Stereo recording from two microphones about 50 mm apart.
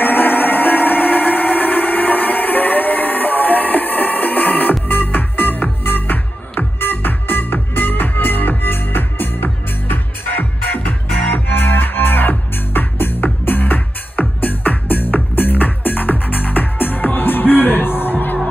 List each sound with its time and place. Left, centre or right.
0.0 s music: left